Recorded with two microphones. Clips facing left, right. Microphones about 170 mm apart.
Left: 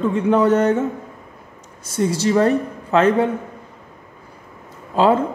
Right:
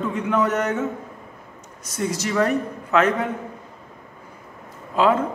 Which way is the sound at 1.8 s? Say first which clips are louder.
Left 6 dB; 30° left (ahead or behind).